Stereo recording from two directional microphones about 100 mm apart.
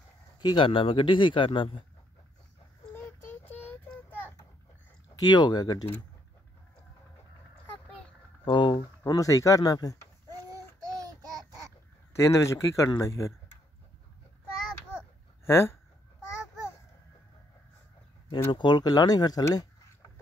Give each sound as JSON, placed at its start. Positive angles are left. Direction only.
{"t": 0.4, "sound": "a man's voice", "side_deg": 50}
{"t": 2.9, "sound": "child singing", "side_deg": 20}
{"t": 5.1, "sound": "speech", "side_deg": 45}
{"t": 8.5, "sound": "speech", "side_deg": 55}
{"t": 8.7, "sound": "speech", "side_deg": 35}
{"t": 12.1, "sound": "speech", "side_deg": 30}
{"t": 15.4, "sound": "speech", "side_deg": 25}
{"t": 18.5, "sound": "speech", "side_deg": 50}